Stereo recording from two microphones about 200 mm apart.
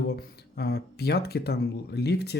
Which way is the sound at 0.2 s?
50° left (ahead or behind).